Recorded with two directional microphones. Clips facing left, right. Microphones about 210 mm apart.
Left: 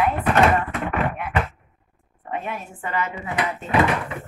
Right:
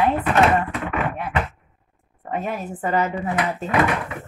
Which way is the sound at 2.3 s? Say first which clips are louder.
Right 4 dB; 40° right (ahead or behind).